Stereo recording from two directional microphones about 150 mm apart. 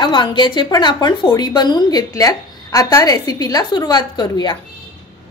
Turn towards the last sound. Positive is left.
turn(degrees=30)  # may be behind; listen again after turning